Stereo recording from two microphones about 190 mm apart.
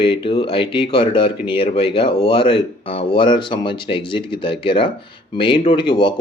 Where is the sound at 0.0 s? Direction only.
30° left (ahead or behind).